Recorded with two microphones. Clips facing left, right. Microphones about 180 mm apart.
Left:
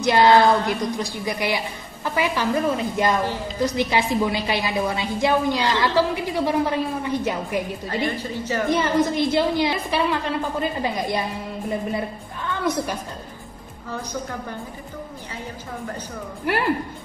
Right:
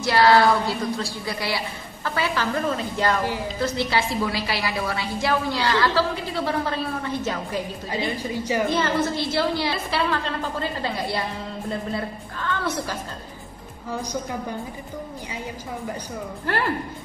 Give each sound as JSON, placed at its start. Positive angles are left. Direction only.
{"t": 0.0, "sound": "a woman's voice", "side_deg": 20}
{"t": 7.9, "sound": "a woman's voice", "side_deg": -10}
{"t": 8.6, "sound": "a woman's voice", "side_deg": 15}
{"t": 16.5, "sound": "a woman's voice", "side_deg": 15}